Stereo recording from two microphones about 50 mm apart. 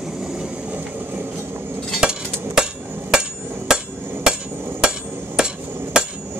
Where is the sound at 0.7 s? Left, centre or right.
Right.